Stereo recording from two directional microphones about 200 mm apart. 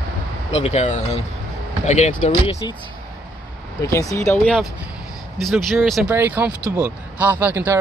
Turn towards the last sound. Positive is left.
turn(degrees=-10)  # may be behind; listen again after turning